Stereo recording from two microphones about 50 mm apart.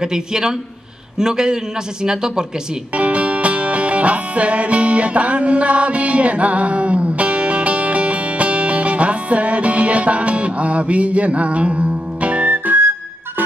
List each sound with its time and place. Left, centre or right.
0.0 s a man's voice: centre
2.9 s music: right
12.5 s music: right